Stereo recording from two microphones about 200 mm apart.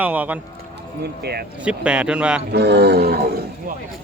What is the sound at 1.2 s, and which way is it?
Speech, 55° right (ahead or behind).